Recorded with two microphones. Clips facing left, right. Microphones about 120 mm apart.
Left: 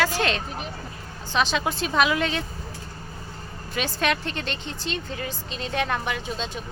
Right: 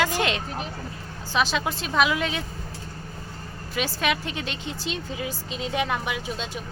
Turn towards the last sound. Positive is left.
turn(degrees=-5)  # may be behind; listen again after turning